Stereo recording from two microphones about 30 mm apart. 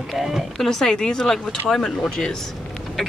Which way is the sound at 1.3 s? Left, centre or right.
Centre.